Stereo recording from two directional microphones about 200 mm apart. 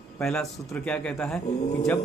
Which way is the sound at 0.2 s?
5° left (ahead or behind).